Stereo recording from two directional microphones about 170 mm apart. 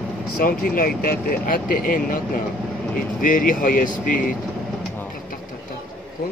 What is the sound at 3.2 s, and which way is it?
Speech, 50° left (ahead or behind).